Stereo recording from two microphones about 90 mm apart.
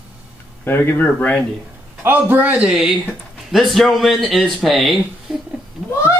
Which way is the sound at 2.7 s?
5° right (ahead or behind).